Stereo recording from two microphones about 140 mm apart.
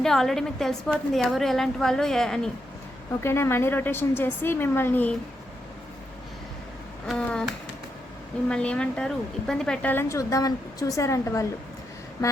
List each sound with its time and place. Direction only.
0.0 s a woman's voice: centre (ahead or behind)
3.2 s a woman's voice: 15° left (ahead or behind)
7.1 s a woman's voice: 5° left (ahead or behind)